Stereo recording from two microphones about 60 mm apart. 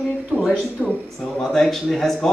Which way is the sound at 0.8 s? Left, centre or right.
Centre.